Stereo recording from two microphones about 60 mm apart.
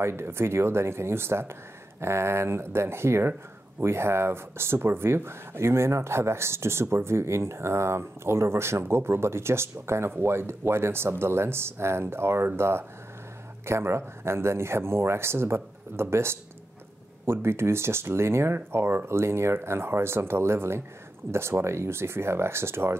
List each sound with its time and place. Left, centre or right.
0.0 s speech: right